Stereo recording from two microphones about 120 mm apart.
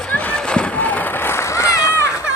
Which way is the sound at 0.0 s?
15° left (ahead or behind).